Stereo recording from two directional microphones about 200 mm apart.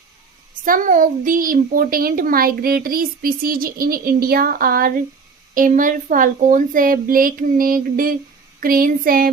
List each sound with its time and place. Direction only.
0.6 s a child's voice: 40° right (ahead or behind)